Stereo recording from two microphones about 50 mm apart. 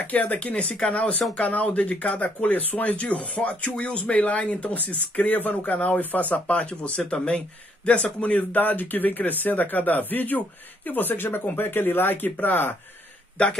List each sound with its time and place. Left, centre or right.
0.0 s speech: left